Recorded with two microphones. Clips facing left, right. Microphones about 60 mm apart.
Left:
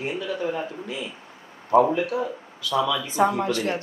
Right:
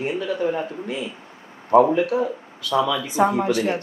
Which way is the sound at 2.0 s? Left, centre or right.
Right.